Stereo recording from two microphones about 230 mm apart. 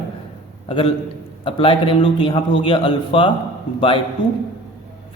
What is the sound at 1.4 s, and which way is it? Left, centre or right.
A man's voice, left.